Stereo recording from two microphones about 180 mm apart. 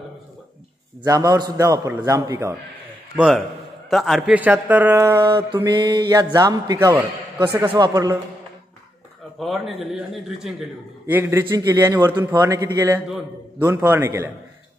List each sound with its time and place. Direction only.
1.0 s a man's voice: 20° right (ahead or behind)
3.2 s a man's voice: centre (ahead or behind); by 8.2 s 20° right (ahead or behind)
9.4 s a man's voice: centre (ahead or behind)